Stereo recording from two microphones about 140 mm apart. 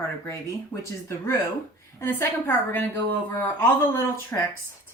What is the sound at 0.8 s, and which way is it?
A woman's voice, 20° left (ahead or behind).